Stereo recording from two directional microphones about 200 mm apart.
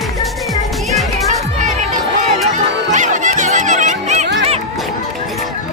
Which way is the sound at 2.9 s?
40° right (ahead or behind).